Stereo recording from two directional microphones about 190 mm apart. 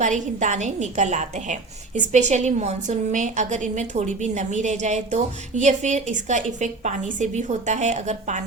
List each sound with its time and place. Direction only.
0.0 s a woman's voice: 40° right (ahead or behind)